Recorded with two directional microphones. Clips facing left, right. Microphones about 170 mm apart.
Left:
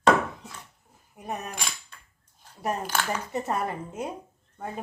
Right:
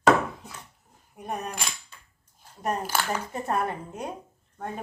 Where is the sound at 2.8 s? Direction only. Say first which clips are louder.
Right 1 dB; 10° right (ahead or behind).